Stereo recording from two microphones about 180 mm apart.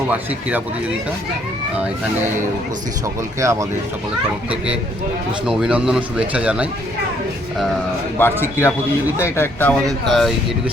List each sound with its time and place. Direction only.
3.4 s speech: 15° right (ahead or behind)
5.5 s speech: 5° right (ahead or behind)
8.2 s speech: 15° left (ahead or behind)